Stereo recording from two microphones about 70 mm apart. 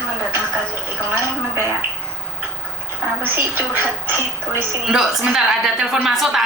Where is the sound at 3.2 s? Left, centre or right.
Right.